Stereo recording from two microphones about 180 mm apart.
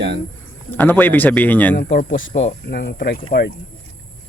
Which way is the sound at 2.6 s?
65° left (ahead or behind).